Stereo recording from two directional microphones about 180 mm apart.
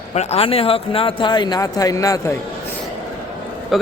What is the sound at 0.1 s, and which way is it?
Speech, 35° left (ahead or behind).